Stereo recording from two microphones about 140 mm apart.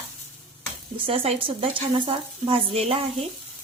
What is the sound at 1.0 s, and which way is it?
Speech, 45° right (ahead or behind).